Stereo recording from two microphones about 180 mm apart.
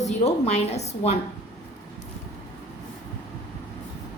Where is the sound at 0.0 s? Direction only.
40° left (ahead or behind).